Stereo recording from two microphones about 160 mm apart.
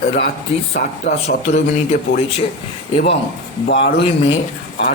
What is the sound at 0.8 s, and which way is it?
Speech, 90° left.